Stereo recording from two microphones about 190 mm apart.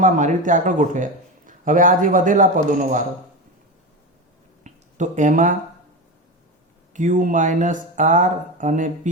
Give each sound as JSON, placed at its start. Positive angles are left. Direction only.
{"t": 0.0, "sound": "a man's voice", "side_deg": -40}
{"t": 4.6, "sound": "a sound", "side_deg": -40}
{"t": 6.9, "sound": "speech", "side_deg": -40}